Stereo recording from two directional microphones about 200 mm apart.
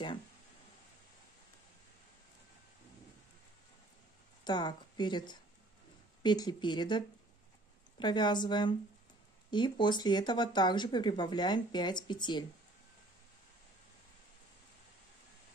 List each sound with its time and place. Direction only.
4.5 s speech: 20° left (ahead or behind)